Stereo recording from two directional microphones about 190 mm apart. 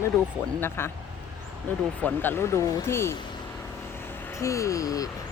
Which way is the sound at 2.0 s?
10° left (ahead or behind).